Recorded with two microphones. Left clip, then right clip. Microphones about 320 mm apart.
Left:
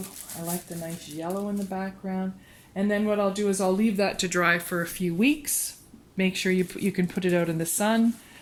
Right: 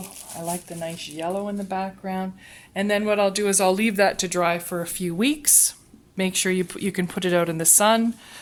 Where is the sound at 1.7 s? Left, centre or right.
Right.